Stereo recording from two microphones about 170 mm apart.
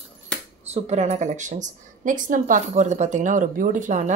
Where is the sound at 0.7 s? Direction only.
40° right (ahead or behind).